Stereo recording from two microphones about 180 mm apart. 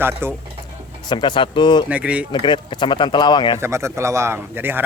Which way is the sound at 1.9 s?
5° right (ahead or behind).